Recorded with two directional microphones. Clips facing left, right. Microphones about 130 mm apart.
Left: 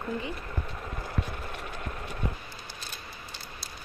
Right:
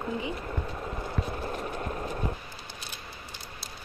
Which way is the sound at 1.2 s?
35° right (ahead or behind).